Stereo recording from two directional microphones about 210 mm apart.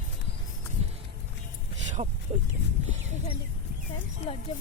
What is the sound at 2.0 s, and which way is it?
Speech, 35° right (ahead or behind).